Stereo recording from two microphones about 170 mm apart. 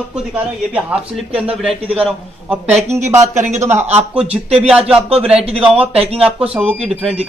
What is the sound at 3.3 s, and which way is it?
Speech, 45° right (ahead or behind).